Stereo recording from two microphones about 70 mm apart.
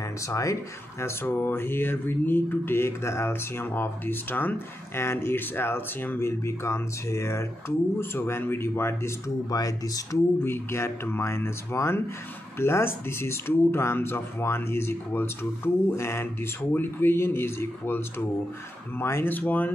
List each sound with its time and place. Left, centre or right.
0.3 s speech: left
1.0 s speech: left
3.6 s speech: left
9.5 s speech: left
10.4 s speech: left